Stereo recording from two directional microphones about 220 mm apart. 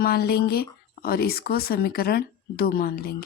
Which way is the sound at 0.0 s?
45° left (ahead or behind).